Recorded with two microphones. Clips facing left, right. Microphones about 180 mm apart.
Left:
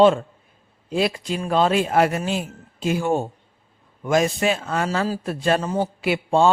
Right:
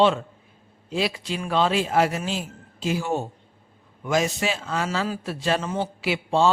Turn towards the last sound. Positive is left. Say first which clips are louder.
# left 3 dB
turn(degrees=50)  # may be behind; listen again after turning